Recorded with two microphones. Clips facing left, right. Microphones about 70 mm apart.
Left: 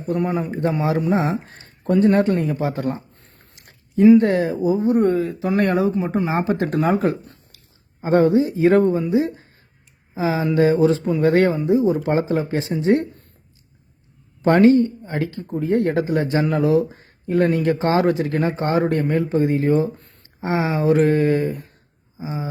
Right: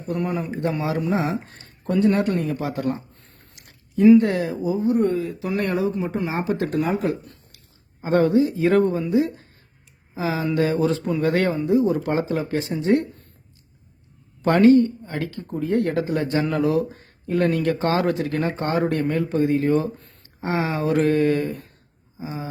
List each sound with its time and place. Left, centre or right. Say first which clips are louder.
0.1 s speech: left 3 dB; left
4.2 s speech: left 4 dB; left
4.9 s speech: left 3 dB; left
8.0 s speech: left 2 dB; left
14.4 s speech: left 1 dB; left
22.2 s speech: left 3 dB; centre